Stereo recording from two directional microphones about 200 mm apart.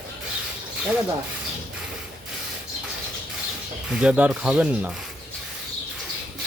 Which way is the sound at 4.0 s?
5° right (ahead or behind).